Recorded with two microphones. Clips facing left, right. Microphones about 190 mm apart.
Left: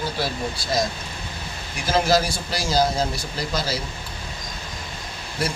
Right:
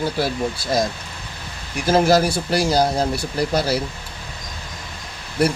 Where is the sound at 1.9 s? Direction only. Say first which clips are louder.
Right 5 dB; 50° right (ahead or behind).